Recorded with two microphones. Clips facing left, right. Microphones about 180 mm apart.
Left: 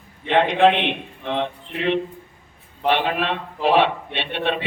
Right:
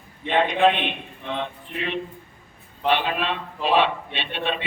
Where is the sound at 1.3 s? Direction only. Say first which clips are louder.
Left 5 dB; 70° left (ahead or behind).